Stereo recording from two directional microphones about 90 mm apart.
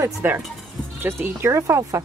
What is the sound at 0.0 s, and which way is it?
Speech, 25° right (ahead or behind).